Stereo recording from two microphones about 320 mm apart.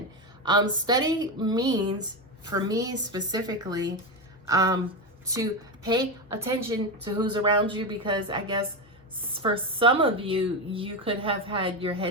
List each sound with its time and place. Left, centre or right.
0.4 s speech: centre